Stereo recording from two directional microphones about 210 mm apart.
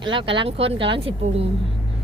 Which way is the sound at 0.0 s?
25° right (ahead or behind).